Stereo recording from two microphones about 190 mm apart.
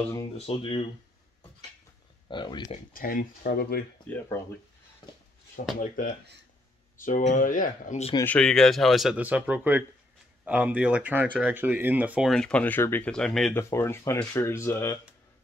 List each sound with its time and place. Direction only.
0.5 s speech: 30° left (ahead or behind)
2.2 s speech: 25° left (ahead or behind)
2.9 s speech: 50° left (ahead or behind)
4.1 s speech: 10° left (ahead or behind)
5.8 s speech: 45° left (ahead or behind)
8.2 s speech: 5° left (ahead or behind)
13.6 s speech: 15° left (ahead or behind)